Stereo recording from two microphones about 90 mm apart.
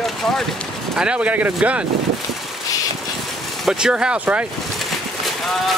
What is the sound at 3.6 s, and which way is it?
Speech, 5° right (ahead or behind).